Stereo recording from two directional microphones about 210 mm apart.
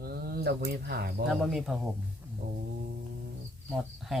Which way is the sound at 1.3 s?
Centre (ahead or behind).